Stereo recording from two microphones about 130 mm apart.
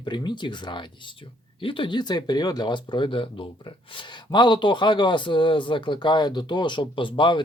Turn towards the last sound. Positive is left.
turn(degrees=40)  # may be behind; listen again after turning